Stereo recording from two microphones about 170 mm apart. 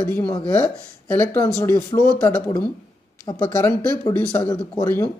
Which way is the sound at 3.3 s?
25° left (ahead or behind).